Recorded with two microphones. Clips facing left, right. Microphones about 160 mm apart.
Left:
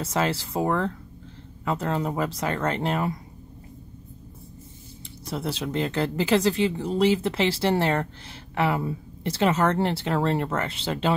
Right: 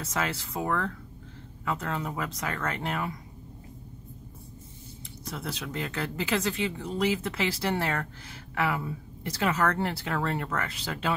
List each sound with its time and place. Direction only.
0.0 s speech: 30° left (ahead or behind)
5.3 s speech: 30° left (ahead or behind)